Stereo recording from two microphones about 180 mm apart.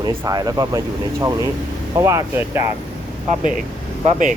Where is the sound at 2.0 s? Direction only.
15° right (ahead or behind).